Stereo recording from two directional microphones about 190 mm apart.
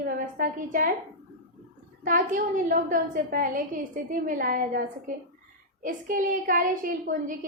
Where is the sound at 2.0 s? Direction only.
45° right (ahead or behind).